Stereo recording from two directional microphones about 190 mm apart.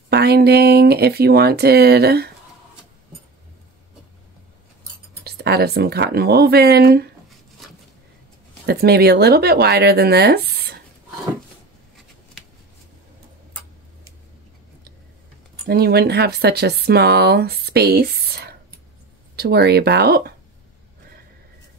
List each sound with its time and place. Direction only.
0.1 s speech: 60° right (ahead or behind)
5.2 s speech: 55° right (ahead or behind)
8.6 s speech: 55° right (ahead or behind)
15.7 s speech: 55° right (ahead or behind)